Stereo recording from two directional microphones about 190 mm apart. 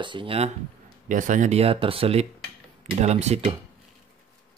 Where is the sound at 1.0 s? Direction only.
40° right (ahead or behind).